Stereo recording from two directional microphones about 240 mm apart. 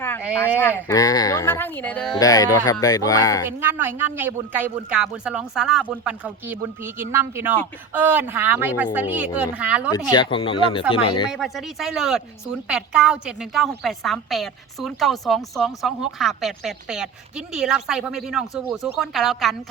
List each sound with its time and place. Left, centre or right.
0.9 s speech: centre
3.4 s speech: centre
10.1 s speech: centre
11.3 s speech: centre